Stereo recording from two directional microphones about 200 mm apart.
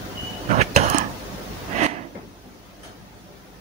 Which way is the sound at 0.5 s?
35° right (ahead or behind).